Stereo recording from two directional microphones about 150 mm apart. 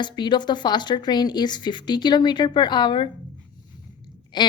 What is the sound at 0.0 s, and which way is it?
A woman's voice, 30° left (ahead or behind).